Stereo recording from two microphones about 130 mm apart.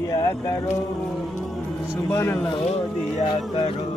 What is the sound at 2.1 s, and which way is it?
Speech, 20° left (ahead or behind).